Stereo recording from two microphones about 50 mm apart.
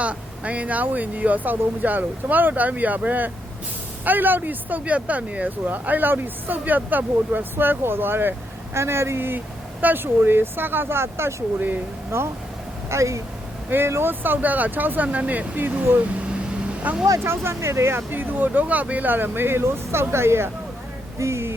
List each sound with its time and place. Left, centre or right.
0.0 s speech: right
7.5 s speech: right
8.7 s speech: right
12.9 s speech: right
13.7 s speech: right
16.8 s speech: right
17.2 s speech: right
18.1 s speech: right
21.2 s speech: right